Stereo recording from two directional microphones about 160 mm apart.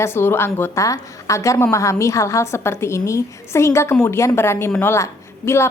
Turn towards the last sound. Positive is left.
turn(degrees=15)  # may be behind; listen again after turning